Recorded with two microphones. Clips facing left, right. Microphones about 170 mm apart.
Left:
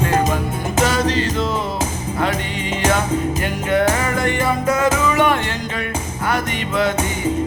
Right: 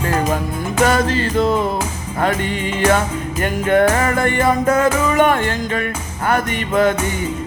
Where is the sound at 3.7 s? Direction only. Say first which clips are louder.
Right 3 dB; 50° right (ahead or behind).